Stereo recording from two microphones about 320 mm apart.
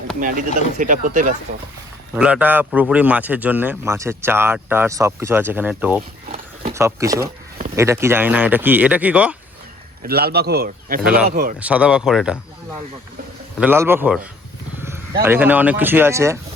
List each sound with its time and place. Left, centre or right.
0.2 s speech: right
2.1 s speech: centre
10.0 s speech: right
11.0 s speech: centre
11.3 s speech: right
11.6 s speech: centre
13.6 s speech: centre